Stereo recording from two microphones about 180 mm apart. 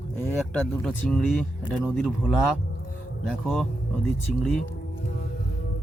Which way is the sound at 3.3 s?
5° right (ahead or behind).